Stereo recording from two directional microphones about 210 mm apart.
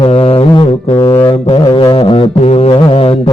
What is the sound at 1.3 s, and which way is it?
Music, 25° left (ahead or behind).